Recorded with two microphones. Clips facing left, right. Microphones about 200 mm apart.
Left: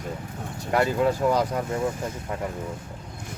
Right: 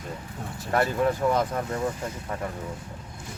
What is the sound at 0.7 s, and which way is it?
Speech, 15° left (ahead or behind).